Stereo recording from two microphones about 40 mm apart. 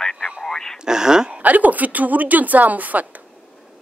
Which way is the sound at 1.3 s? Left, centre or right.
Right.